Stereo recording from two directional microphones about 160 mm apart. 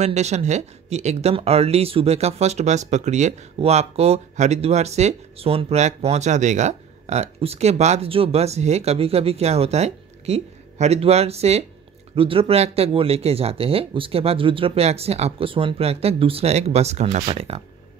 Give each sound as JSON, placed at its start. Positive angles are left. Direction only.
{"t": 0.0, "sound": "speech", "side_deg": -45}